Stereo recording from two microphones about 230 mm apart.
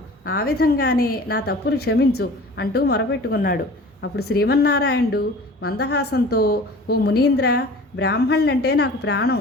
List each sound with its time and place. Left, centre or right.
0.3 s a woman's voice: left